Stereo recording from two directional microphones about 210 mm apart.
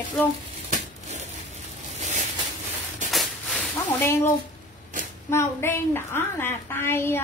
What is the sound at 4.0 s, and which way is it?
A woman's voice, 10° left (ahead or behind).